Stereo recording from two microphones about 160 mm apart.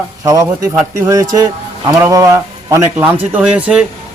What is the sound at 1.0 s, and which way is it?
A man's voice, 20° right (ahead or behind).